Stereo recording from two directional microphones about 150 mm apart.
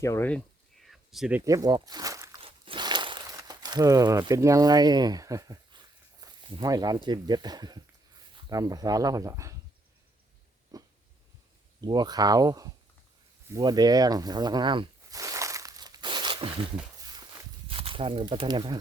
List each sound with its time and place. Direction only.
0.0 s speech: 20° left (ahead or behind)
0.3 s a sound: 5° left (ahead or behind)
1.4 s speech: 20° right (ahead or behind)
2.4 s crumpling: 35° right (ahead or behind)
8.4 s speech: 25° right (ahead or behind)
10.7 s dog: 25° right (ahead or behind)
11.8 s speech: 25° right (ahead or behind)
13.5 s snake: 25° right (ahead or behind)
17.0 s walk: 25° right (ahead or behind)